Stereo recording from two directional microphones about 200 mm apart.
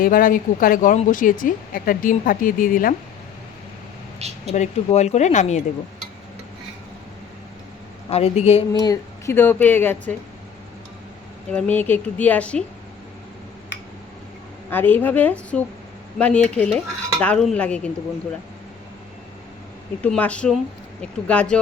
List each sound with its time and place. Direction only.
0.0 s speech: 45° left (ahead or behind)
4.2 s a sound: 35° right (ahead or behind)
4.5 s speech: 35° left (ahead or behind)
8.1 s speech: 30° left (ahead or behind)
8.7 s speech: 15° left (ahead or behind)
11.5 s speech: 10° left (ahead or behind)
14.7 s speech: 10° left (ahead or behind)
16.1 s cutlery: 5° left (ahead or behind)
20.0 s cutlery: 5° left (ahead or behind)